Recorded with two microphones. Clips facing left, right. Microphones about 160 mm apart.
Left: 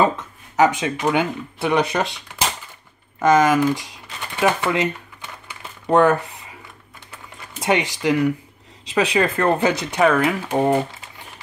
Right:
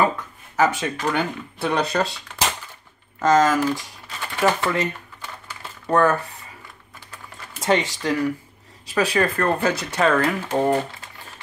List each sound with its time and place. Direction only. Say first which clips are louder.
0.6 s speech: left 3 dB; 20° left (ahead or behind)
3.2 s speech: left 2 dB; 15° left (ahead or behind)
4.4 s typing: left 2 dB; 15° left (ahead or behind)
7.6 s speech: left 1 dB; 15° left (ahead or behind)